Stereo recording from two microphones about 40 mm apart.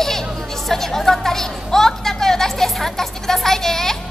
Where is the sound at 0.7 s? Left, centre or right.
Centre.